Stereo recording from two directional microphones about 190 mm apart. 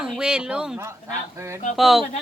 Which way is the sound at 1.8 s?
Centre (ahead or behind).